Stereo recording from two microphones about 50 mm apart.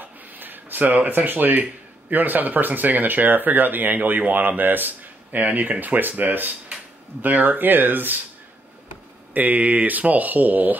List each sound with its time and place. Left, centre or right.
0.0 s speech: right
9.3 s speech: right